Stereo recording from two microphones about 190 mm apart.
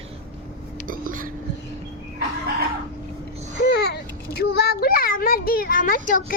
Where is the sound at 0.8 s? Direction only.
45° right (ahead or behind).